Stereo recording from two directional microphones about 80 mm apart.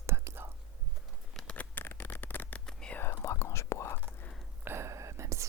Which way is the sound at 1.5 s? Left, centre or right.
Left.